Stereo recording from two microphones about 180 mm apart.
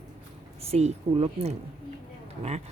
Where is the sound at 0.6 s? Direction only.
35° right (ahead or behind).